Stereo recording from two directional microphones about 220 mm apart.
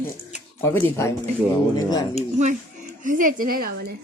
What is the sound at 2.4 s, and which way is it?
A woman's voice, 35° right (ahead or behind).